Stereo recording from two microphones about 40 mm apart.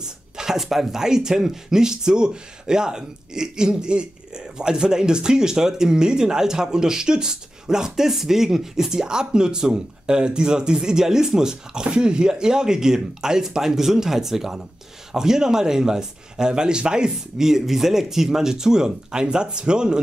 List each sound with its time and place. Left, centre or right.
0.4 s speech: centre